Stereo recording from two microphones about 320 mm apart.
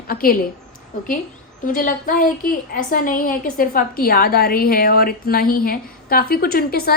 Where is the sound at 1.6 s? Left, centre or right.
Left.